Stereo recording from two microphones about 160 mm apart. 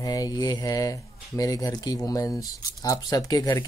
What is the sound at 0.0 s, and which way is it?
Speech, 25° left (ahead or behind).